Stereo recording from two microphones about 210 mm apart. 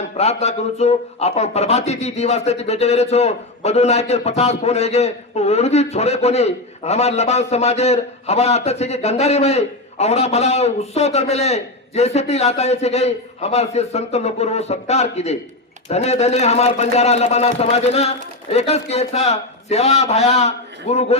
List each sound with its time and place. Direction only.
0.2 s a man's voice: 30° left (ahead or behind)